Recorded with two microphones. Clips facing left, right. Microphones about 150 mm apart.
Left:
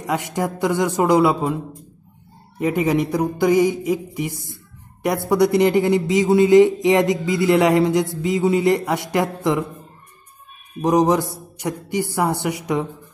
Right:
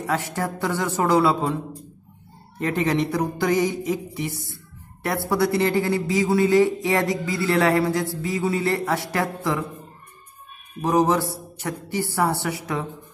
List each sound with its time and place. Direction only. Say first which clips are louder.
0.0 s a man's voice: left 3 dB; 15° left (ahead or behind)
2.6 s a man's voice: left 3 dB; 10° left (ahead or behind)
10.8 s a man's voice: left 3 dB; 15° left (ahead or behind)